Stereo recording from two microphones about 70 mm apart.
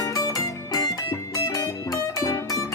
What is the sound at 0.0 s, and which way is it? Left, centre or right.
Music, left.